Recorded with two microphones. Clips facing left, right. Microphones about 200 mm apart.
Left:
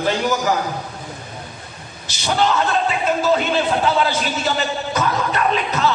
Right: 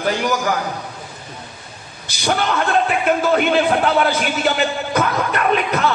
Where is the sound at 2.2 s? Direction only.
60° right (ahead or behind).